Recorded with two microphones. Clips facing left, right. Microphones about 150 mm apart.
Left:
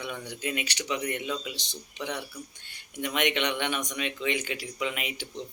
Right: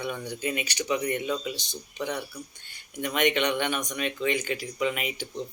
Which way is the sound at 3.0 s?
Centre (ahead or behind).